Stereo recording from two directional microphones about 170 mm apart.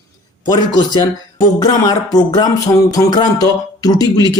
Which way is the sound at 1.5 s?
25° left (ahead or behind).